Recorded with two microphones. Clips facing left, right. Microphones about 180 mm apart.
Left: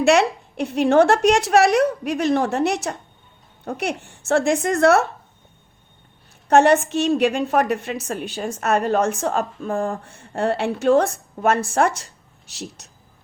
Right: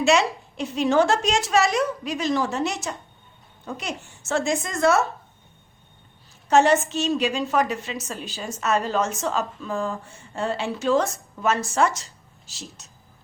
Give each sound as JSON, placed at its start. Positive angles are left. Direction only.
{"t": 0.0, "sound": "a woman's voice", "side_deg": 60}
{"t": 6.5, "sound": "a woman's voice", "side_deg": 60}